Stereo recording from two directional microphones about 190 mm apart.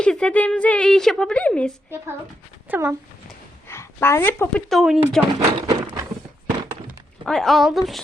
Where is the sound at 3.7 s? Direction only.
15° left (ahead or behind).